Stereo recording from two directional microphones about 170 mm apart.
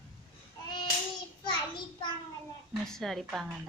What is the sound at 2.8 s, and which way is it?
Speech, centre (ahead or behind).